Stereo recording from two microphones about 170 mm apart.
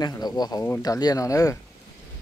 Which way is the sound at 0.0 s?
25° left (ahead or behind).